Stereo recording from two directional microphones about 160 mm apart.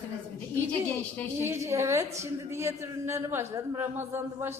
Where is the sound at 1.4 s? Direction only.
15° right (ahead or behind).